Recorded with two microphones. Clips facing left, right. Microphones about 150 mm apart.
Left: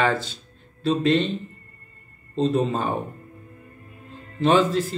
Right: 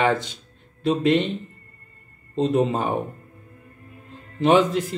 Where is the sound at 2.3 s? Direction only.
15° right (ahead or behind).